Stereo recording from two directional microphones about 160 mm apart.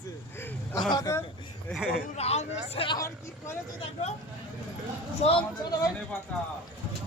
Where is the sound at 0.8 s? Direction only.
25° left (ahead or behind).